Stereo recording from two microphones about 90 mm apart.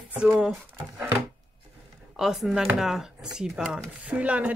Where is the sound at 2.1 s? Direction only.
5° right (ahead or behind).